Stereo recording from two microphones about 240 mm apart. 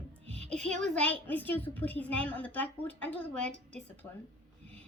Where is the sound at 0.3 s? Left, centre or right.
Right.